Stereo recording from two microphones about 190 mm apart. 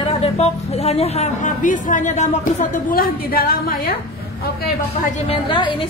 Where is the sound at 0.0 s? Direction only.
30° left (ahead or behind); by 3.9 s 50° left (ahead or behind).